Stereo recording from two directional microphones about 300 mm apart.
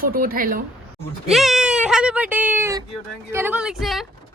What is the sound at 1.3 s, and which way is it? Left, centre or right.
A woman's voice, centre.